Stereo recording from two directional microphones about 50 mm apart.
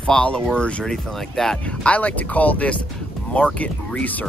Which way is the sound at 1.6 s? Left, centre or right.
Left.